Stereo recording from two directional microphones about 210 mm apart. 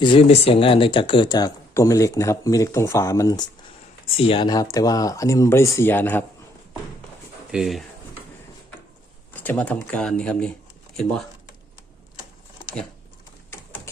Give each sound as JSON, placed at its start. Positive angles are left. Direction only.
{"t": 0.0, "sound": "speech", "side_deg": 25}
{"t": 7.5, "sound": "speech", "side_deg": 0}
{"t": 9.3, "sound": "speech", "side_deg": 10}